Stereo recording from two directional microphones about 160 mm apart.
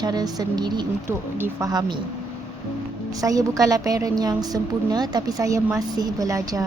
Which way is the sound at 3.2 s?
20° right (ahead or behind).